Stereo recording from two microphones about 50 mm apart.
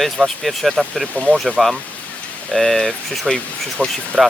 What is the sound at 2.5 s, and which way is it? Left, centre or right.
Speech, centre.